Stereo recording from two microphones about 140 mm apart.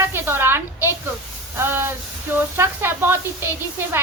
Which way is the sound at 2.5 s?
15° right (ahead or behind).